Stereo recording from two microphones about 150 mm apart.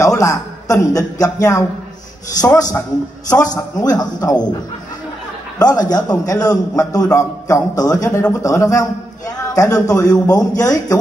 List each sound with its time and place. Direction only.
0.2 s a man's voice: 20° left (ahead or behind)
5.6 s a man's voice: 25° left (ahead or behind)